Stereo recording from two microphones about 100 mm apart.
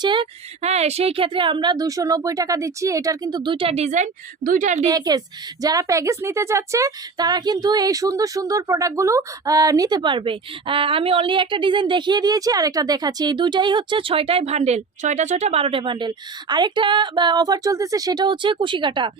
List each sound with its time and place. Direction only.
0.0 s speech: 55° right (ahead or behind)
0.6 s speech: 90° right; by 3.4 s 35° right (ahead or behind)
3.4 s speech: 60° right (ahead or behind); by 3.9 s 85° right
4.9 s speech: 40° right (ahead or behind)
10.0 s a woman's voice: 55° right (ahead or behind)